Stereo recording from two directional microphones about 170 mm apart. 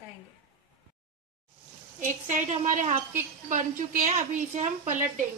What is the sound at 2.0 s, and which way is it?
A woman's voice, 45° right (ahead or behind).